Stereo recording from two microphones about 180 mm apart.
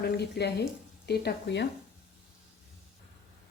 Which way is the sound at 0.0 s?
65° left (ahead or behind).